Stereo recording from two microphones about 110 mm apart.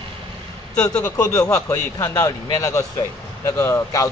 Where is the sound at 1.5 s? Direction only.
30° left (ahead or behind).